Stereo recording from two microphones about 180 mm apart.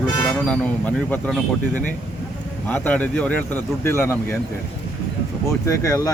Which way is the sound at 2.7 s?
10° left (ahead or behind).